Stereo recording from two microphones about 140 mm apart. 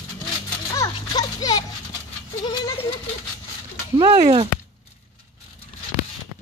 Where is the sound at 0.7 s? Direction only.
25° left (ahead or behind).